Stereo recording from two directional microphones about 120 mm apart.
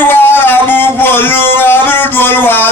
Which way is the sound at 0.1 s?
15° left (ahead or behind).